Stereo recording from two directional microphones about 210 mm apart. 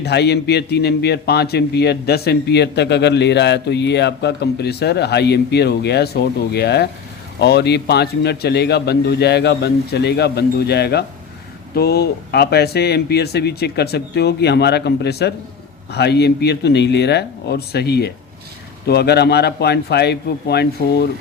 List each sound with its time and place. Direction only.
0.0 s a man's voice: 50° left (ahead or behind)